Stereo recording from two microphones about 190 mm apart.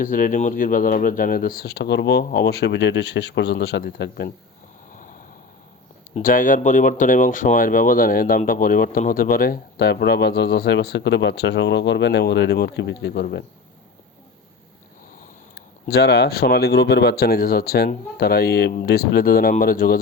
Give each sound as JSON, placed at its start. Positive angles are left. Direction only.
{"t": 0.0, "sound": "speech", "side_deg": 45}
{"t": 6.2, "sound": "speech", "side_deg": 45}
{"t": 15.5, "sound": "speech", "side_deg": 60}